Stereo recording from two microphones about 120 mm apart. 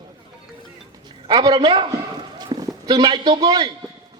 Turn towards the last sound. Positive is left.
turn(degrees=-35)  # may be behind; listen again after turning